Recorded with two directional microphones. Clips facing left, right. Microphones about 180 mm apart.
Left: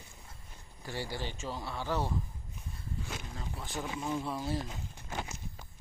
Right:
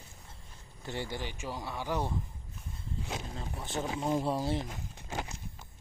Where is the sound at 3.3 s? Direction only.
20° right (ahead or behind).